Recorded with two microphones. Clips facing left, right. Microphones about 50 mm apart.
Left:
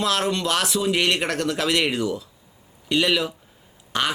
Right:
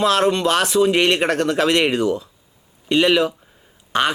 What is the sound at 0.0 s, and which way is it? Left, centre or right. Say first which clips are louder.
Speech: right 6 dB; centre.